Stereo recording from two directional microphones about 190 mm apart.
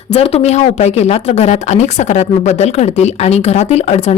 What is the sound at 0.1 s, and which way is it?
Speech, 30° left (ahead or behind).